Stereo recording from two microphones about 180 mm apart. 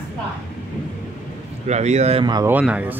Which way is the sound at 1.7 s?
40° right (ahead or behind).